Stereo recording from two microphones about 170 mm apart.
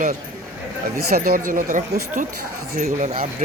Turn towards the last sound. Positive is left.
turn(degrees=-50)  # may be behind; listen again after turning